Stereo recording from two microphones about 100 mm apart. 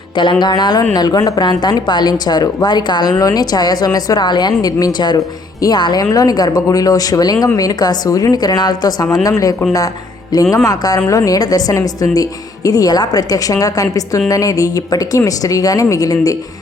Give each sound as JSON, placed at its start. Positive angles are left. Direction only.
{"t": 0.2, "sound": "a woman's voice", "side_deg": 50}
{"t": 10.7, "sound": "a woman's voice", "side_deg": 40}